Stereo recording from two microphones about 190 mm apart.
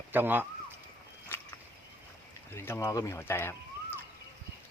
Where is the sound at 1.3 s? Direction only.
10° left (ahead or behind).